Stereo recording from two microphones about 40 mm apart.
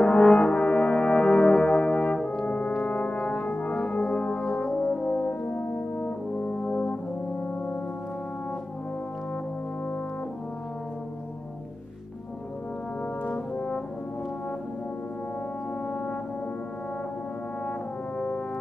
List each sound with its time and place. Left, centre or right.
0.0 s brass instrument: left
2.4 s brass instrument: left
5.0 s brass instrument: left
13.3 s brass instrument: left